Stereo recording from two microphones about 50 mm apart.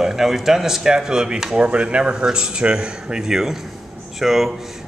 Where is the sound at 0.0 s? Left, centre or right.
Centre.